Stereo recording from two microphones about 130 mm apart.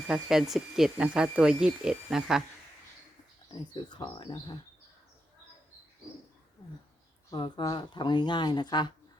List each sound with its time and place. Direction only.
0.1 s speech: 5° right (ahead or behind)
3.5 s speech: 35° left (ahead or behind)
7.3 s speech: 40° left (ahead or behind)